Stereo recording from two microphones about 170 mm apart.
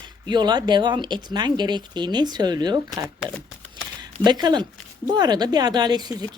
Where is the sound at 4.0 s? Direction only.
25° right (ahead or behind).